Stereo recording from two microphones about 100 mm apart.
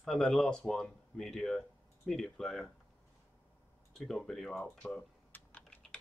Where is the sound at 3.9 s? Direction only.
5° left (ahead or behind).